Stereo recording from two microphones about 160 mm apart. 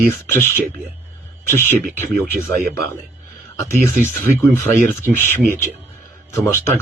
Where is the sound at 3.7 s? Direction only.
50° right (ahead or behind).